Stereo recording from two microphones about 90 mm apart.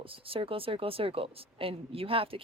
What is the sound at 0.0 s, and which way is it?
Speech, 90° right.